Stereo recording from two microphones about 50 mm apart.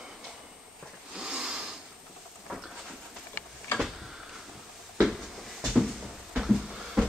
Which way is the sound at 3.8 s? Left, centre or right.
Centre.